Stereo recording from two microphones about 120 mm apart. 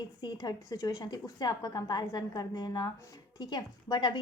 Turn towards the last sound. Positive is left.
turn(degrees=40)  # may be behind; listen again after turning